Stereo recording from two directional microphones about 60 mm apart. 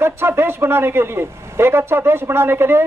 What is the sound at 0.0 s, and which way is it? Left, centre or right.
A man's voice, right.